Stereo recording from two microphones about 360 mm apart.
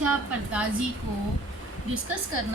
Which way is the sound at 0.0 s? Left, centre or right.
Centre.